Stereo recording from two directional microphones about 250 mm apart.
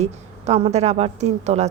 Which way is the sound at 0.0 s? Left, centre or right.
Right.